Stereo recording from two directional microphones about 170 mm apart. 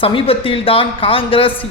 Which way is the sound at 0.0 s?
30° left (ahead or behind).